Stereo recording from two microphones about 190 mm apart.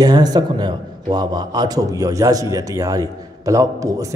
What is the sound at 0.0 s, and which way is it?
A man's voice, 20° right (ahead or behind).